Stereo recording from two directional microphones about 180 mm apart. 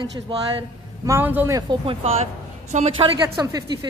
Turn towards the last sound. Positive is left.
turn(degrees=-20)  # may be behind; listen again after turning